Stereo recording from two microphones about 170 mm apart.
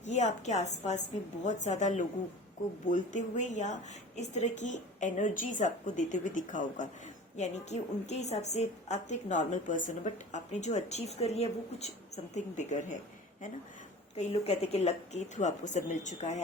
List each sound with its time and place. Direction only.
0.0 s a woman's voice: 45° left (ahead or behind)
14.2 s a woman's voice: 40° left (ahead or behind)